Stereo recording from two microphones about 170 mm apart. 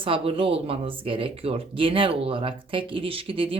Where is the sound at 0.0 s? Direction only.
30° right (ahead or behind).